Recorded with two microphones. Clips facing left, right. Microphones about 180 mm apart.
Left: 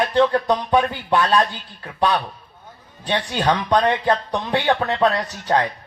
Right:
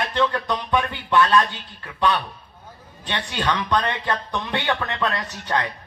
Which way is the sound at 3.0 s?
40° left (ahead or behind).